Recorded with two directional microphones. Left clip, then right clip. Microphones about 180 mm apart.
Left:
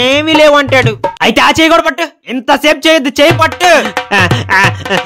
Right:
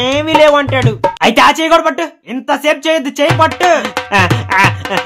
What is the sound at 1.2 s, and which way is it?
Speech, 35° left (ahead or behind).